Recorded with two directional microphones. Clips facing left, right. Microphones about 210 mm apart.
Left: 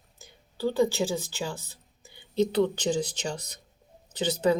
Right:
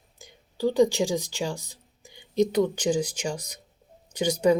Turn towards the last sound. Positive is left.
turn(degrees=-15)  # may be behind; listen again after turning